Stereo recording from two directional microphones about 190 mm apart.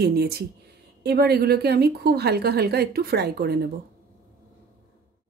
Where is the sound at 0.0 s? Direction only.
55° right (ahead or behind).